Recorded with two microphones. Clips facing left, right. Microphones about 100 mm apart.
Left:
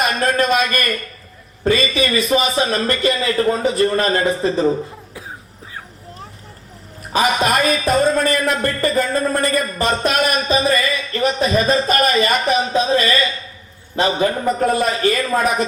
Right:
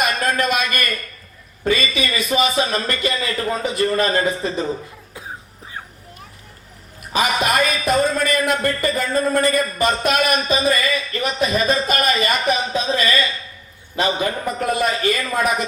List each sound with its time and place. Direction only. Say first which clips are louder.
0.0 s a man's voice: left 2 dB; 35° left (ahead or behind)
7.1 s a man's voice: left 2 dB; 35° left (ahead or behind)